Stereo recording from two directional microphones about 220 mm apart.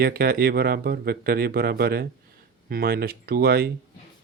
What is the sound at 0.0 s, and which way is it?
Speech, 45° right (ahead or behind).